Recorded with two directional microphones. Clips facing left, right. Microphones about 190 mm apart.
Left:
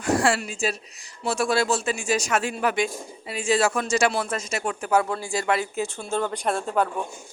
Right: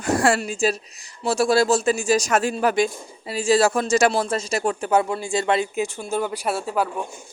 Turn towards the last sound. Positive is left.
turn(degrees=-5)  # may be behind; listen again after turning